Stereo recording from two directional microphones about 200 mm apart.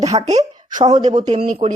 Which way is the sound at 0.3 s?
35° right (ahead or behind).